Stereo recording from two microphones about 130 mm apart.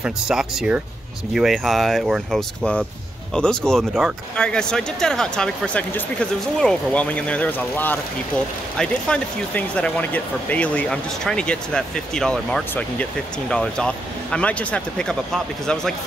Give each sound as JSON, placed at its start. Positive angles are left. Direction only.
{"t": 0.0, "sound": "speech", "side_deg": -5}